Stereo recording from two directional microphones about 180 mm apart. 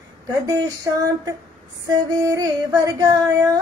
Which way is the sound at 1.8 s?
20° right (ahead or behind).